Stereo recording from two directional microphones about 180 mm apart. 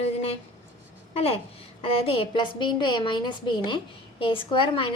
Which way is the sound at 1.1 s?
35° left (ahead or behind).